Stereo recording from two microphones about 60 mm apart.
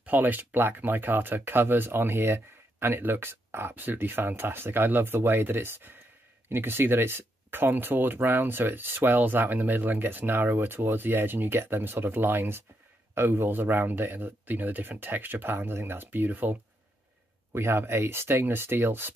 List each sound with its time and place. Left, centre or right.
0.0 s speech: right
17.6 s speech: right